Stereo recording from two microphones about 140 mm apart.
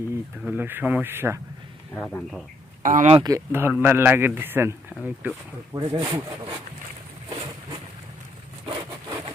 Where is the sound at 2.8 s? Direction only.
65° right (ahead or behind).